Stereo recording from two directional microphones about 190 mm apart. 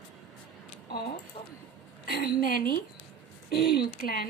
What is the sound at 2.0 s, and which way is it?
A woman's voice, 55° left (ahead or behind).